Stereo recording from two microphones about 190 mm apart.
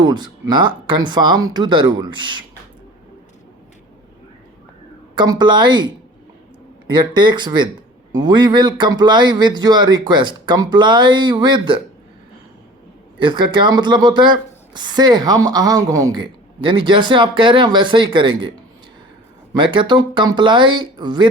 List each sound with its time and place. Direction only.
0.0 s speech: 20° right (ahead or behind)
5.1 s speech: 20° right (ahead or behind)
6.9 s speech: 25° right (ahead or behind)
13.1 s speech: 25° right (ahead or behind)
19.5 s speech: 25° right (ahead or behind)